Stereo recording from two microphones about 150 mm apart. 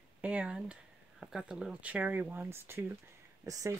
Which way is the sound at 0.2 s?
10° right (ahead or behind).